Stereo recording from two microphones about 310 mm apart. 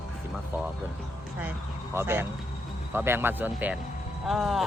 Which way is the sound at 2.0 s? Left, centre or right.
Centre.